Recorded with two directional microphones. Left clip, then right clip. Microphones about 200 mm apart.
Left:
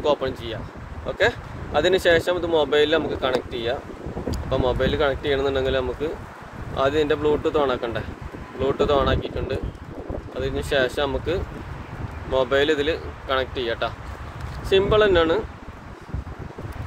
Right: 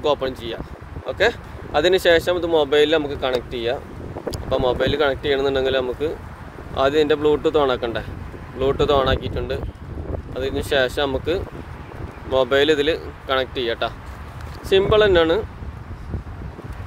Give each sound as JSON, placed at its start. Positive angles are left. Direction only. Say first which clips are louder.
{"t": 0.0, "sound": "speech", "louder": "right 1 dB", "side_deg": -40}